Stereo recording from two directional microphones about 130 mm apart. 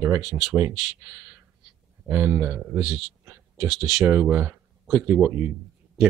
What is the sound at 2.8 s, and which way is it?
Speech, centre (ahead or behind).